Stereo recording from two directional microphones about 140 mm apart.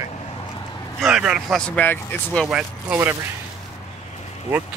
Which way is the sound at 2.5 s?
5° right (ahead or behind).